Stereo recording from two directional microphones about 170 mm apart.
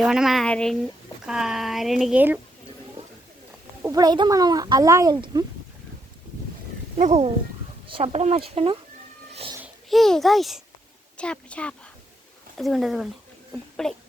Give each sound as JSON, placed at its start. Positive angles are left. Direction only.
{"t": 0.0, "sound": "speech", "side_deg": -5}
{"t": 3.8, "sound": "speech", "side_deg": -20}
{"t": 6.9, "sound": "speech", "side_deg": -40}
{"t": 9.3, "sound": "baby cry", "side_deg": -35}
{"t": 9.9, "sound": "a woman's voice", "side_deg": 0}